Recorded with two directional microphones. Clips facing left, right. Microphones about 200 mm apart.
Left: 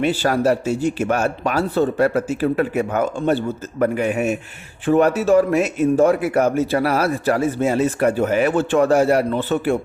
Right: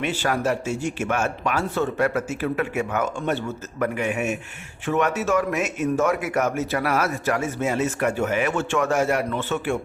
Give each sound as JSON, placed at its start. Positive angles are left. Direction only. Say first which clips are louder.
{"t": 0.0, "sound": "a man's voice", "louder": "left 6 dB", "side_deg": 35}